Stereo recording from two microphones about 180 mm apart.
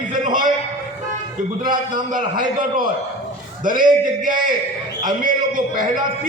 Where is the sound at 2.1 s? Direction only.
50° right (ahead or behind).